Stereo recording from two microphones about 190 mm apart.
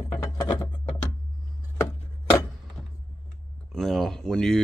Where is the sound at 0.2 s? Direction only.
20° left (ahead or behind).